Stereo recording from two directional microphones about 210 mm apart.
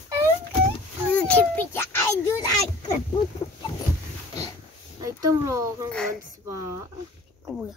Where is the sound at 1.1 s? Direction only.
5° left (ahead or behind).